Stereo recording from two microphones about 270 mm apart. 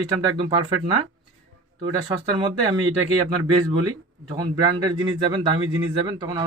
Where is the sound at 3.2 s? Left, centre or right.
Centre.